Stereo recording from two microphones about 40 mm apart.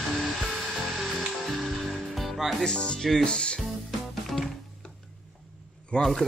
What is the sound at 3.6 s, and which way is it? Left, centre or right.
Music, centre.